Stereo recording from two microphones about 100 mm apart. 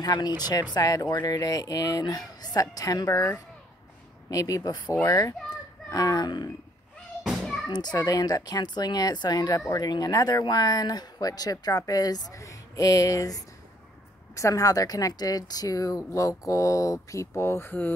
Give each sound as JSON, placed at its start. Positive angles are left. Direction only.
{"t": 0.0, "sound": "speech", "side_deg": 45}
{"t": 4.3, "sound": "speech", "side_deg": 35}
{"t": 7.2, "sound": "children playing", "side_deg": 0}
{"t": 7.7, "sound": "speech", "side_deg": 45}